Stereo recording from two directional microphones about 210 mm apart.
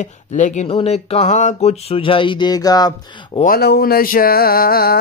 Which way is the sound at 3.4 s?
50° left (ahead or behind).